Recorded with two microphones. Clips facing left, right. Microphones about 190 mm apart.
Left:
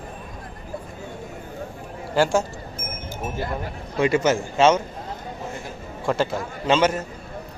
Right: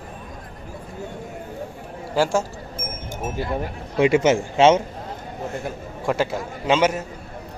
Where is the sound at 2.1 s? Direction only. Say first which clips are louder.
Left 1 dB; 5° right (ahead or behind).